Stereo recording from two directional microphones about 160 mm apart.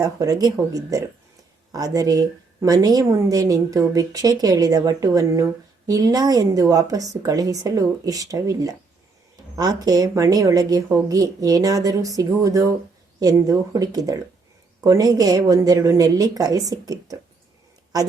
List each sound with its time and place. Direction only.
0.0 s a woman's voice: 20° right (ahead or behind)